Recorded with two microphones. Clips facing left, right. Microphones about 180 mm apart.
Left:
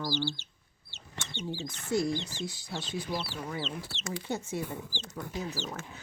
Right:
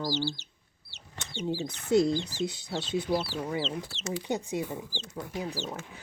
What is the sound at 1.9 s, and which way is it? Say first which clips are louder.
Speech: right 6 dB; 20° right (ahead or behind).